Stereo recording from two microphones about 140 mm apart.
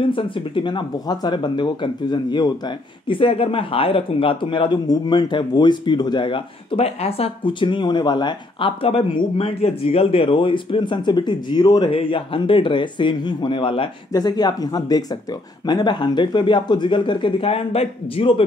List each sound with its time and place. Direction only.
0.0 s a man's voice: 35° left (ahead or behind)